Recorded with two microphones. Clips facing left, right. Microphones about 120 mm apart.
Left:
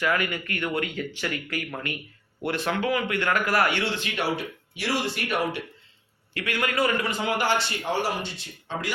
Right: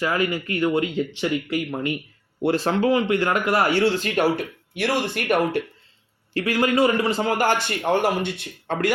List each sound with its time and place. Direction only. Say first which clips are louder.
0.0 s speech: right 3 dB; 30° right (ahead or behind)
3.7 s speech: right 8 dB; 40° right (ahead or behind)
6.3 s a man's voice: right 7 dB; 35° right (ahead or behind); by 8.9 s 55° right (ahead or behind)